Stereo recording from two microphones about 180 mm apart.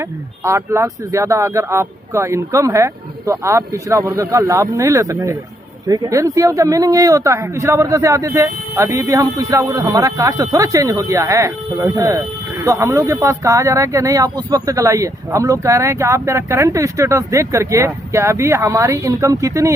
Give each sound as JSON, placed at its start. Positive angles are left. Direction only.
{"t": 0.0, "sound": "speech", "side_deg": -15}